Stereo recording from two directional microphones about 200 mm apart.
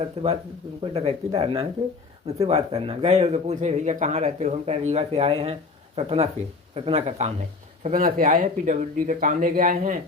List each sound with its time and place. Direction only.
0.2 s speech: 30° right (ahead or behind)
7.9 s speech: 40° right (ahead or behind)